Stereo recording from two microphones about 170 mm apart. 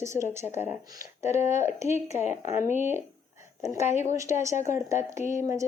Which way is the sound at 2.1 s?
40° left (ahead or behind).